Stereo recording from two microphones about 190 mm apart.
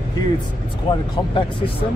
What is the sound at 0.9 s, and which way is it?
Speech, 30° left (ahead or behind).